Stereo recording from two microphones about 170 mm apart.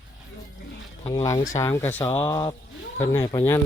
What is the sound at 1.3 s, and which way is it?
Speech, 20° left (ahead or behind).